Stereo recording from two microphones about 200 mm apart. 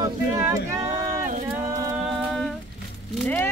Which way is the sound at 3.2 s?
10° left (ahead or behind).